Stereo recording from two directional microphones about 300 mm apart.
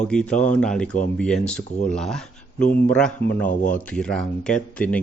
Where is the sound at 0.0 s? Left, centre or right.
Centre.